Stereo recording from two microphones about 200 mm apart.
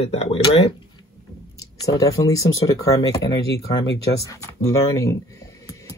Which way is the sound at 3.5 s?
55° left (ahead or behind).